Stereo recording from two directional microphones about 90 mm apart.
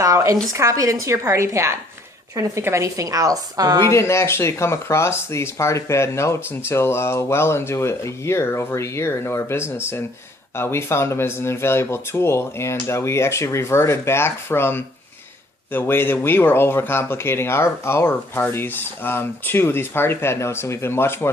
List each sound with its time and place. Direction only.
0.0 s a sound: 35° right (ahead or behind)
0.5 s a woman's voice: 35° right (ahead or behind)
3.8 s speech: 30° left (ahead or behind)